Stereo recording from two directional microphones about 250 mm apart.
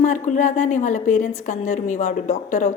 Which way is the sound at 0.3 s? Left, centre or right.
Left.